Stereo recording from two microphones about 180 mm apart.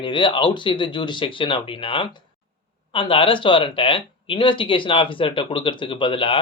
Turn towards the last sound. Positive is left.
turn(degrees=30)  # may be behind; listen again after turning